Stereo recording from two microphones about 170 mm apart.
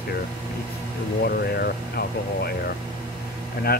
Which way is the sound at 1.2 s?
65° left (ahead or behind).